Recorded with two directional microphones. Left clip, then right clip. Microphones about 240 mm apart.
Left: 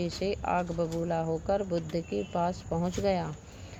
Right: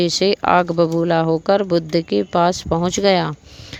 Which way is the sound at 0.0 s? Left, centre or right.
Right.